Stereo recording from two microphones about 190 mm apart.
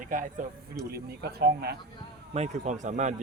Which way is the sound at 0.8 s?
55° right (ahead or behind).